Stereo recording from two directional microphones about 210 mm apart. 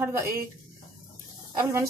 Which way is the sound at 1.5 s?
15° right (ahead or behind).